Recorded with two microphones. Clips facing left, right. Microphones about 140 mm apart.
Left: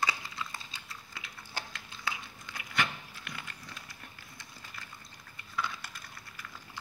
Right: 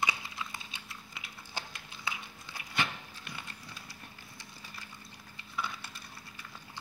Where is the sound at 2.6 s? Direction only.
25° right (ahead or behind).